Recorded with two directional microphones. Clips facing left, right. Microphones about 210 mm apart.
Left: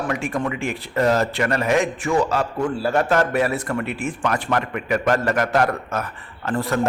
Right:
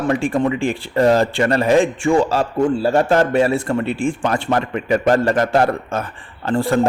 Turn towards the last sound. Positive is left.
turn(degrees=-30)  # may be behind; listen again after turning